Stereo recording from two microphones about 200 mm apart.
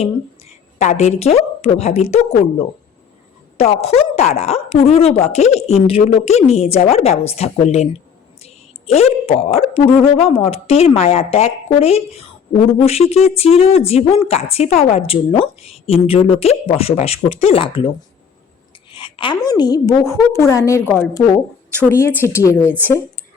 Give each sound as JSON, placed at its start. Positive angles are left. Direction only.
{"t": 0.8, "sound": "speech", "side_deg": 35}
{"t": 3.6, "sound": "a woman's voice", "side_deg": 30}
{"t": 18.9, "sound": "a woman's voice", "side_deg": 25}
{"t": 22.6, "sound": "speech", "side_deg": -10}